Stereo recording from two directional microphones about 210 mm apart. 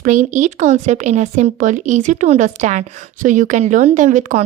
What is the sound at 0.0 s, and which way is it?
Speech, 35° right (ahead or behind).